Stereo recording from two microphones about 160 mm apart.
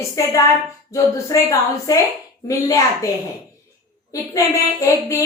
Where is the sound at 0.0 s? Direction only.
20° left (ahead or behind).